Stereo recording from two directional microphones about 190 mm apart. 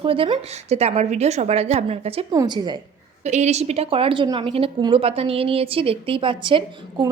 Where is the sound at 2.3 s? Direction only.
20° right (ahead or behind).